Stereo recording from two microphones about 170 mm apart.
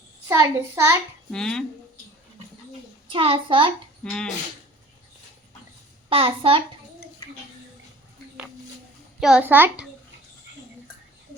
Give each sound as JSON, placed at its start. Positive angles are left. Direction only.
{"t": 0.3, "sound": "a child's voice", "side_deg": -15}
{"t": 1.3, "sound": "speech", "side_deg": 5}
{"t": 3.1, "sound": "a child's voice", "side_deg": -30}
{"t": 4.0, "sound": "speech", "side_deg": 5}
{"t": 6.1, "sound": "a child's voice", "side_deg": -30}
{"t": 7.2, "sound": "speech", "side_deg": 25}
{"t": 9.2, "sound": "a child's voice", "side_deg": -10}